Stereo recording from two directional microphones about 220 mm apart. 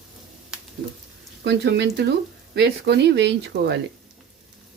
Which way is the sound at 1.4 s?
50° right (ahead or behind).